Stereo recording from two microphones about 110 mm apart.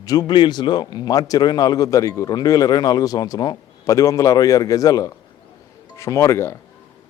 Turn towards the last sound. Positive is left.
turn(degrees=25)  # may be behind; listen again after turning